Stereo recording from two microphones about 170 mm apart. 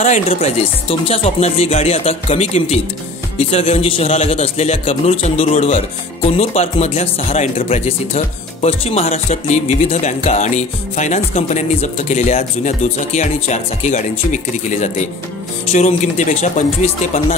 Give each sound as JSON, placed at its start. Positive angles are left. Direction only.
{"t": 0.0, "sound": "a man's voice", "side_deg": 40}
{"t": 9.1, "sound": "music", "side_deg": 40}